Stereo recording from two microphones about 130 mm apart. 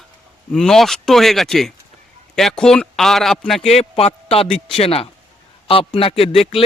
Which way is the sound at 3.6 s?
55° left (ahead or behind).